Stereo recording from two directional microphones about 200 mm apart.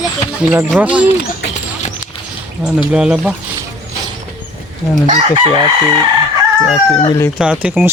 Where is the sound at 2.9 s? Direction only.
5° right (ahead or behind).